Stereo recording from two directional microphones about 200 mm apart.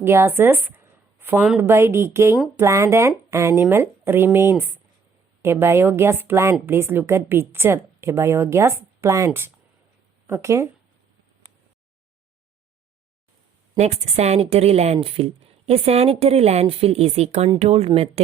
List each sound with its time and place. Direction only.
0.0 s a woman's voice: 10° right (ahead or behind)
13.7 s speech: 35° right (ahead or behind)